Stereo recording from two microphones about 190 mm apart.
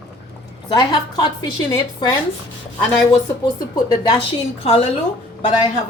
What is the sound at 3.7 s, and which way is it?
Speech, 20° left (ahead or behind).